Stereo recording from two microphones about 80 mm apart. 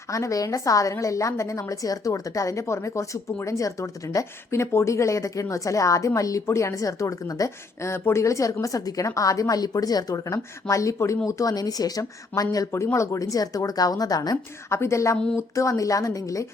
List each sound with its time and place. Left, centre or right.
0.1 s a woman's voice: left
12.7 s a woman's voice: left
14.7 s a woman's voice: left